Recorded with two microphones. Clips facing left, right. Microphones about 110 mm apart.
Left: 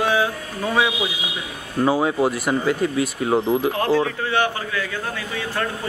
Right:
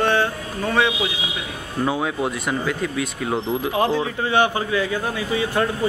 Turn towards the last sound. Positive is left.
turn(degrees=-15)  # may be behind; listen again after turning